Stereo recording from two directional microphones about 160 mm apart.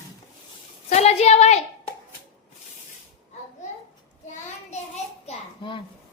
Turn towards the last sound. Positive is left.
turn(degrees=30)  # may be behind; listen again after turning